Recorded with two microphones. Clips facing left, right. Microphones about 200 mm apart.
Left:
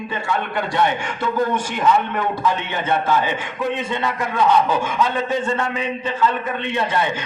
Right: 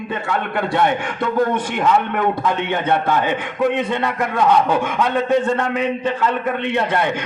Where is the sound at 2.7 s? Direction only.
60° right (ahead or behind).